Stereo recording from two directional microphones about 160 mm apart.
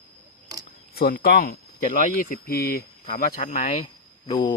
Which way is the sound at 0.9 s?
70° left (ahead or behind).